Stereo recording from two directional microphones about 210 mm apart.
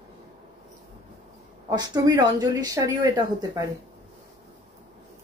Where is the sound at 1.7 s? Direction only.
20° right (ahead or behind).